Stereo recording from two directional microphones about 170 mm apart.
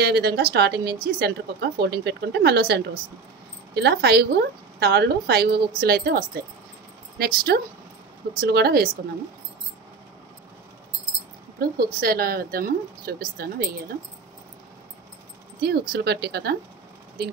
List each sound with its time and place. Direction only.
0.0 s a woman's voice: 75° right (ahead or behind)
11.7 s speech: 60° right (ahead or behind)
15.9 s a woman's voice: 70° right (ahead or behind)